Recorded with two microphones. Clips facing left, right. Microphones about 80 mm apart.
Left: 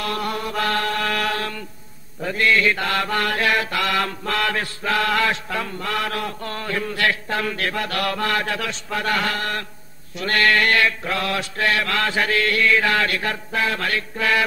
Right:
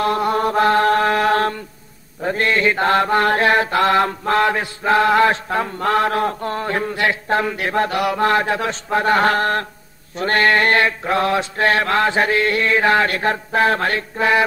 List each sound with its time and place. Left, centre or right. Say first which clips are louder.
0.0 s chant: right 7 dB; right
0.4 s mantra: right 10 dB; right